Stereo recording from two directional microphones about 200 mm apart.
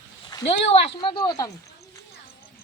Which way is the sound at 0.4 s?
25° left (ahead or behind).